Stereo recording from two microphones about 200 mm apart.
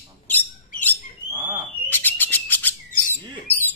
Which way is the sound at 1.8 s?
10° left (ahead or behind).